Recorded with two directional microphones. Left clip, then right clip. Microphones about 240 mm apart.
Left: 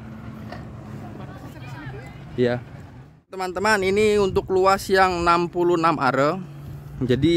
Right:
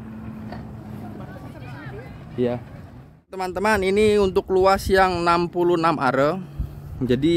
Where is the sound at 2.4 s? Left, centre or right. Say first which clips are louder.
Left 2 dB; centre.